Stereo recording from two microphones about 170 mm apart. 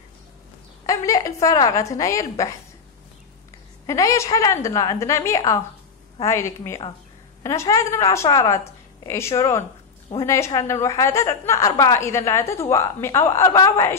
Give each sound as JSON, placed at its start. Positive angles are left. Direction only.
{"t": 0.8, "sound": "a woman's voice", "side_deg": 20}
{"t": 3.8, "sound": "a woman's voice", "side_deg": 20}